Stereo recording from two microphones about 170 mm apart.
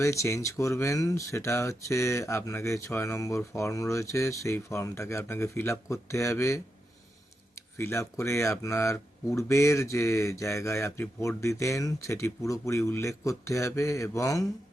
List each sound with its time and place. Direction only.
0.0 s speech: 15° left (ahead or behind)